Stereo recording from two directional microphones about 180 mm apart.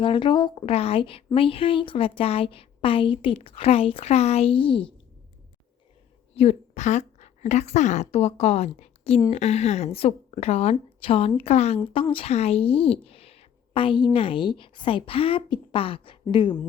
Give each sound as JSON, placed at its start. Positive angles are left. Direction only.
{"t": 0.0, "sound": "a woman's voice", "side_deg": 25}
{"t": 6.3, "sound": "a woman's voice", "side_deg": 35}